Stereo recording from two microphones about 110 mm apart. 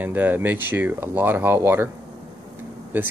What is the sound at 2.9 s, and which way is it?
Speech, 15° right (ahead or behind).